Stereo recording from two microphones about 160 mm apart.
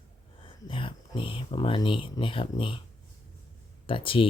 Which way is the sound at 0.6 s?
35° left (ahead or behind).